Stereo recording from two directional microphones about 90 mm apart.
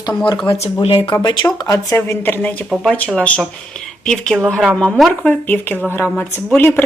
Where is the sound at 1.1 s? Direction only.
55° left (ahead or behind).